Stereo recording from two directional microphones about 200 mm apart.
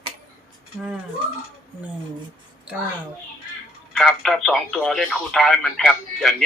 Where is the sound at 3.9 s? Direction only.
Centre (ahead or behind).